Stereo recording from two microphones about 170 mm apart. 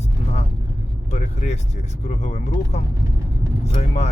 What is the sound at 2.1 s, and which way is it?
Speech, 40° left (ahead or behind).